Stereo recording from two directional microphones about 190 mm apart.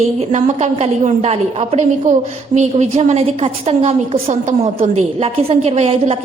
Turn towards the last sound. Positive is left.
turn(degrees=-35)  # may be behind; listen again after turning